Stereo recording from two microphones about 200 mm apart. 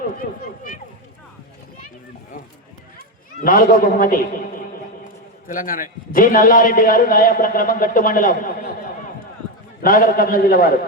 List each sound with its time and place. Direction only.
3.4 s a man's voice: 45° left (ahead or behind)
5.5 s a man's voice: 45° left (ahead or behind)
9.8 s a man's voice: 45° left (ahead or behind)